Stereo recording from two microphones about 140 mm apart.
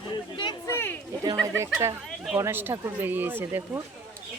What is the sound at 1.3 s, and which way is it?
A man's voice, 20° right (ahead or behind).